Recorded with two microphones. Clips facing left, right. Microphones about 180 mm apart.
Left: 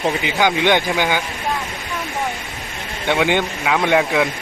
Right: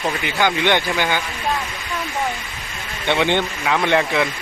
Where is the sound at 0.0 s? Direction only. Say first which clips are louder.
Left 2 dB; 15° left (ahead or behind).